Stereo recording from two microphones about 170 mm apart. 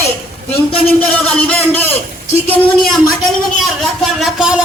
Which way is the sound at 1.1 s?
5° left (ahead or behind).